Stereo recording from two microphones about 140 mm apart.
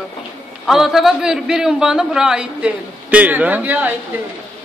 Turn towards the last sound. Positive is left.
turn(degrees=-10)  # may be behind; listen again after turning